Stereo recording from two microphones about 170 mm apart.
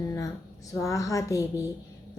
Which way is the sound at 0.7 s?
20° left (ahead or behind).